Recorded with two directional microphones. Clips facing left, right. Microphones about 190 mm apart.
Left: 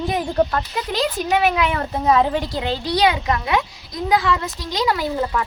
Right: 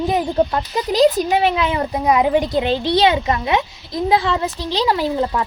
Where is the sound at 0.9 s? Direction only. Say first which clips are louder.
Right 10 dB; 40° right (ahead or behind).